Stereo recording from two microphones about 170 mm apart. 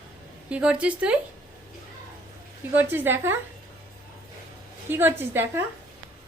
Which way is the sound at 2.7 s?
10° right (ahead or behind).